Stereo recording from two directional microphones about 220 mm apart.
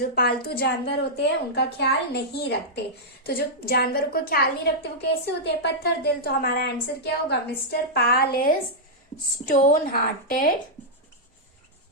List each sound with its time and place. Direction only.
0.1 s a woman's voice: 45° left (ahead or behind)